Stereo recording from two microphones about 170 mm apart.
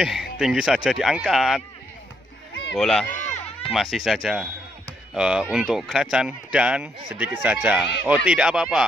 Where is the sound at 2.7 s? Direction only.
5° left (ahead or behind).